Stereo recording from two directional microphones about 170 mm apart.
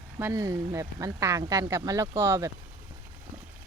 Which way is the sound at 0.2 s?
15° right (ahead or behind).